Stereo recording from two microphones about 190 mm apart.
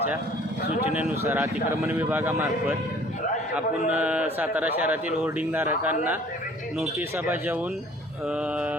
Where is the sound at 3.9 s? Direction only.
5° right (ahead or behind).